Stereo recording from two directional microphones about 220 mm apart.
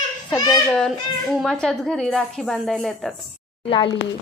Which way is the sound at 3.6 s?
25° left (ahead or behind).